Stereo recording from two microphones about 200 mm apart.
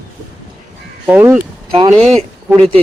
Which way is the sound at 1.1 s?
10° right (ahead or behind).